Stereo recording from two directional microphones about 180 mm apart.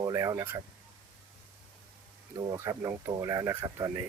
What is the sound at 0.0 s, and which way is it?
Speech, 20° right (ahead or behind).